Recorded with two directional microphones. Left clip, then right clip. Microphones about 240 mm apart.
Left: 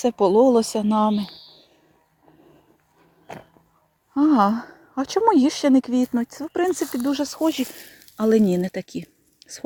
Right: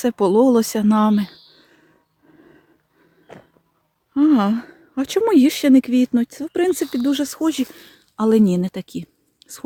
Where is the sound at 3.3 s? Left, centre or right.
Left.